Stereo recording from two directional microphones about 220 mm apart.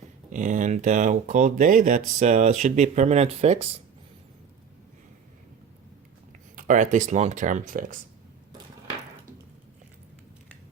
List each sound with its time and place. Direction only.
0.3 s speech: 35° right (ahead or behind)
6.6 s speech: 35° right (ahead or behind)